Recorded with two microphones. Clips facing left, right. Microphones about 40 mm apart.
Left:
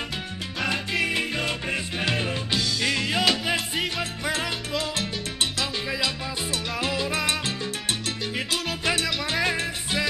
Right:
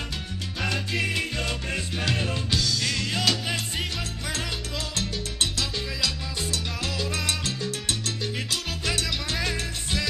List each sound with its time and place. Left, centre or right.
2.0 s music: left
4.3 s salsa music: centre
9.0 s music: centre